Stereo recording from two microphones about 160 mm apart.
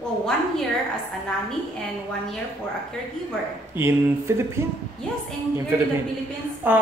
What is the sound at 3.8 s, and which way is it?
Speech, 15° right (ahead or behind).